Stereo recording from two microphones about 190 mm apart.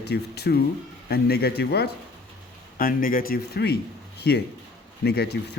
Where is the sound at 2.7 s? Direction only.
45° left (ahead or behind).